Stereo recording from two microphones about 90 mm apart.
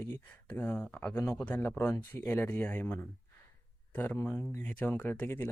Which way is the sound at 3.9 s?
20° left (ahead or behind).